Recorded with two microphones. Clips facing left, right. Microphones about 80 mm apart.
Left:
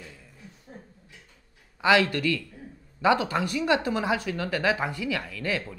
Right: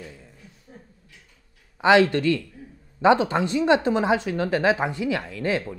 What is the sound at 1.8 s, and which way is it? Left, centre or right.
Speech, right.